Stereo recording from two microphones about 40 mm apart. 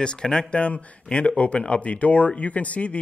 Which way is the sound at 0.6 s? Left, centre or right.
Left.